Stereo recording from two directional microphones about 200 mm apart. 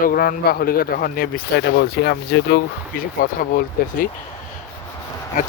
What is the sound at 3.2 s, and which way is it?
Speech, 45° left (ahead or behind).